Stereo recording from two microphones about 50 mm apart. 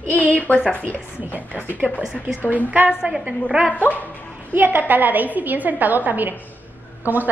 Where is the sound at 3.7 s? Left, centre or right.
Left.